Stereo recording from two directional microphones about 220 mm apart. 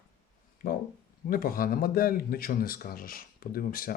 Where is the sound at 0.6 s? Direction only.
40° left (ahead or behind).